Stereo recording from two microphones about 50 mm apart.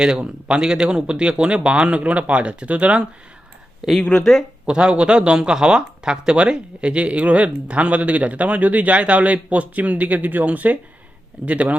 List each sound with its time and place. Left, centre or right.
0.0 s speech: centre
3.8 s speech: centre
4.6 s speech: centre